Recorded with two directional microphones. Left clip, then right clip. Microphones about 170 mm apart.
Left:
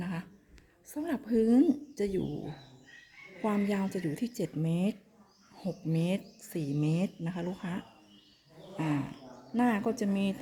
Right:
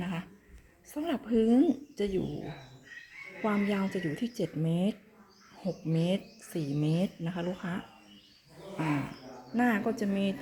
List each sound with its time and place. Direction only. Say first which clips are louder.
0.0 s a sound: right 2 dB; 15° left (ahead or behind)
0.9 s a woman's voice: right 1 dB; 10° left (ahead or behind)
3.4 s speech: right 1 dB; 20° left (ahead or behind)
9.6 s speech: right 1 dB; 20° left (ahead or behind)